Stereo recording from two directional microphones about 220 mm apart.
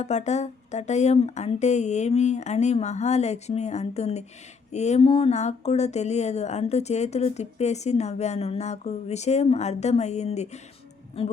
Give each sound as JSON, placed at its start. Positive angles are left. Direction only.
{"t": 0.0, "sound": "speech", "side_deg": 30}